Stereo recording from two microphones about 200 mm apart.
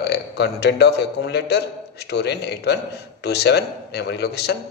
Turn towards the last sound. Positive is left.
turn(degrees=55)  # may be behind; listen again after turning